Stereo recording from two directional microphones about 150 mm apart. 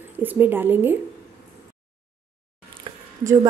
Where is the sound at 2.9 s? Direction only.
35° right (ahead or behind).